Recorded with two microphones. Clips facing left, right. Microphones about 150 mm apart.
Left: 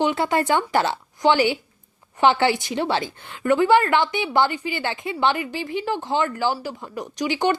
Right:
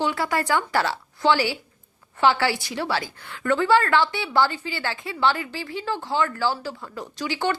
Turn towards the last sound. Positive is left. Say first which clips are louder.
# left 4 dB
turn(degrees=20)  # may be behind; listen again after turning